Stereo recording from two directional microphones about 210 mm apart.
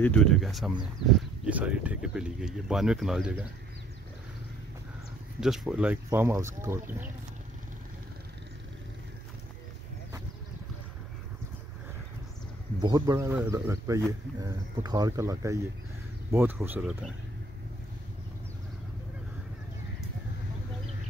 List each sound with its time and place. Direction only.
0.0 s speech: 5° left (ahead or behind)
5.4 s speech: centre (ahead or behind)
12.8 s speech: 20° right (ahead or behind)